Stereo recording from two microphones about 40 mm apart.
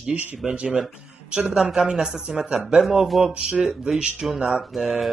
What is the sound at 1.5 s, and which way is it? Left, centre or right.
Speech, centre.